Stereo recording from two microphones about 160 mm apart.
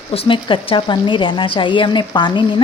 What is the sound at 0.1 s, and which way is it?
A woman's voice, 35° left (ahead or behind).